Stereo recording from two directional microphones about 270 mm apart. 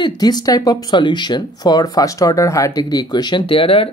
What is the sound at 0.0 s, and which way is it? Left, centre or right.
Speech, centre.